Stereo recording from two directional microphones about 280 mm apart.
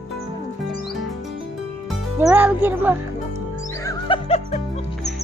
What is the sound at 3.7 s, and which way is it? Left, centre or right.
Music, centre.